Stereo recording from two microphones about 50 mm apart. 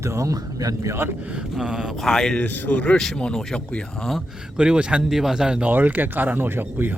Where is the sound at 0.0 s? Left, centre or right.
Right.